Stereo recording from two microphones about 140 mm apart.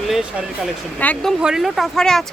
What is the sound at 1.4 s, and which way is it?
Speech, centre (ahead or behind).